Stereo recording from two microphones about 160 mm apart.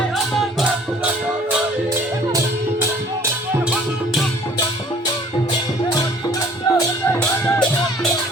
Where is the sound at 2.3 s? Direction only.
15° right (ahead or behind).